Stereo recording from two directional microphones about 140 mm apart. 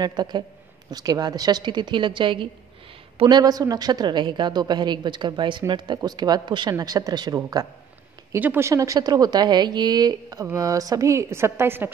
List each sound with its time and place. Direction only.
0.0 s a woman's voice: 30° right (ahead or behind)
8.4 s a woman's voice: 15° right (ahead or behind)